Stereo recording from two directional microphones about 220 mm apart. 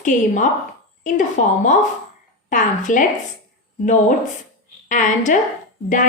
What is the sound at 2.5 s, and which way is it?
Speech, 35° left (ahead or behind).